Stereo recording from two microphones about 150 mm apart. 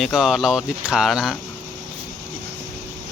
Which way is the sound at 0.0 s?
5° right (ahead or behind).